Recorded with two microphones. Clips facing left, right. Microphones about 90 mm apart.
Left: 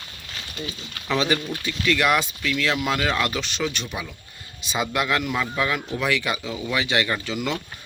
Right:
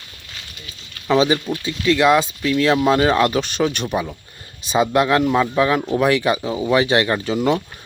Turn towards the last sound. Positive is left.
turn(degrees=-40)  # may be behind; listen again after turning